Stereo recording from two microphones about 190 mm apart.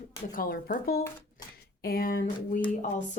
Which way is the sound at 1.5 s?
50° left (ahead or behind).